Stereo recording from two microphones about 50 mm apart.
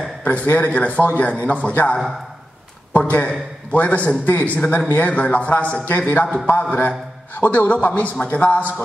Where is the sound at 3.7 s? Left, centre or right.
Left.